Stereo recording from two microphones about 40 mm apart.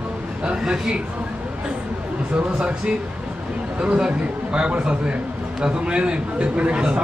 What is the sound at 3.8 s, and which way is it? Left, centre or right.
Speech, right.